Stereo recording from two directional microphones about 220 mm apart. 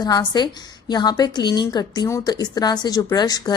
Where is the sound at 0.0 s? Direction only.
20° left (ahead or behind).